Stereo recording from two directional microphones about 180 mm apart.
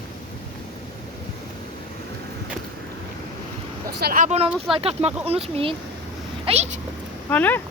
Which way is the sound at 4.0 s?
55° right (ahead or behind).